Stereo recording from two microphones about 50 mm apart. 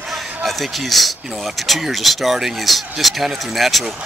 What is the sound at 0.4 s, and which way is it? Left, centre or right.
Speech, centre.